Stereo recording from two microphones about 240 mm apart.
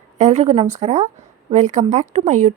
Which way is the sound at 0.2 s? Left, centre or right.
Right.